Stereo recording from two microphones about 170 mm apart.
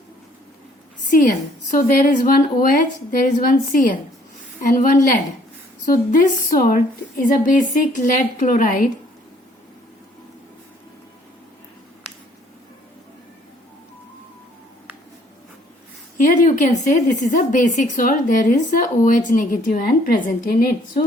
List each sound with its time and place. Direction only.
1.1 s a woman's voice: 50° left (ahead or behind)
16.1 s speech: 50° left (ahead or behind)